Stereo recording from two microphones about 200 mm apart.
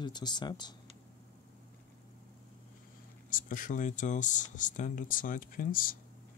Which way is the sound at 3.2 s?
40° left (ahead or behind).